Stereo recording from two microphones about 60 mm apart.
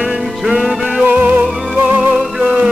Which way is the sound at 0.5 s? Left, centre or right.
Centre.